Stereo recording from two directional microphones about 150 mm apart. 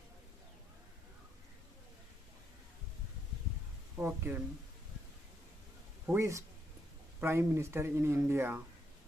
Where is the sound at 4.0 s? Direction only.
15° right (ahead or behind).